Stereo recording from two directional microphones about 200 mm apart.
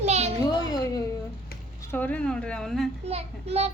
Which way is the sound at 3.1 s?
30° right (ahead or behind).